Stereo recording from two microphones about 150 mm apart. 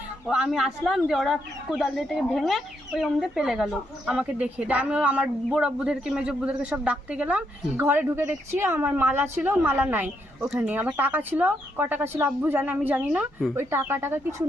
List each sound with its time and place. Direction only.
0.3 s speech: 5° right (ahead or behind)